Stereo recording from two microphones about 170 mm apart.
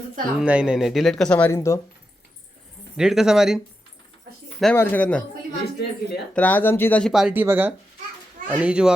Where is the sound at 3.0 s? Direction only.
5° right (ahead or behind).